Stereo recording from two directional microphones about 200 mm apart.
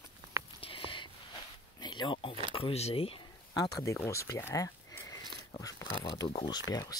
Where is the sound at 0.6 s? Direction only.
25° left (ahead or behind).